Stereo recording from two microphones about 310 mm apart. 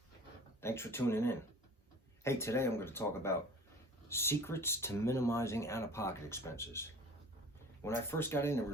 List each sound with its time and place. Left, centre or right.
0.6 s speech: centre
7.9 s speech: centre